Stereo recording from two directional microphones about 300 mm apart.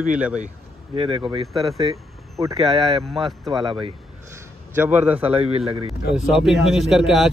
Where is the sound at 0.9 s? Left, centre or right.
Centre.